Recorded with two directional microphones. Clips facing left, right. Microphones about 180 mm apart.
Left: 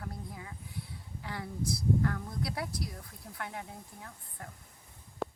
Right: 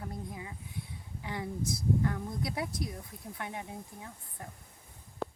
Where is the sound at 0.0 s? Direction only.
15° right (ahead or behind).